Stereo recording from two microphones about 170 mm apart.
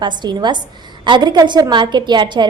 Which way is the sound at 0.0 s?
25° right (ahead or behind).